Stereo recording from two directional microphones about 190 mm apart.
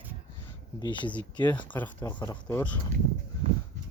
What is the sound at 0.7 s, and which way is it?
Speech, 25° left (ahead or behind).